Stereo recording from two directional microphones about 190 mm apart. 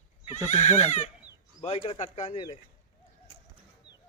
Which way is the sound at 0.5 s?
35° left (ahead or behind).